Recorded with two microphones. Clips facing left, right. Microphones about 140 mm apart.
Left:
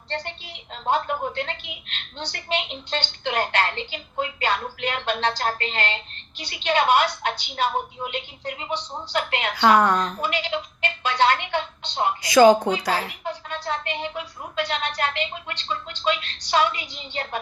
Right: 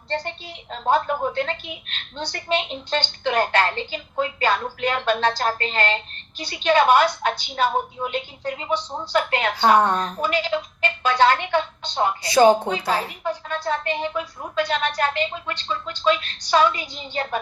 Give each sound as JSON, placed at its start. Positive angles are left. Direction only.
{"t": 0.7, "sound": "speech", "side_deg": -35}